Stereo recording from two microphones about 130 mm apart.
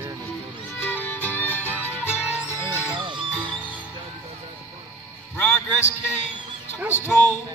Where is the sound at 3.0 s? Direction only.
40° right (ahead or behind).